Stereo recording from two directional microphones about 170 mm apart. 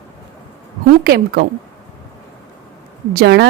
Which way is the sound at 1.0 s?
65° right (ahead or behind).